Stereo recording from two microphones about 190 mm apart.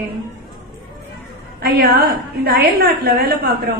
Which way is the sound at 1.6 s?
55° right (ahead or behind).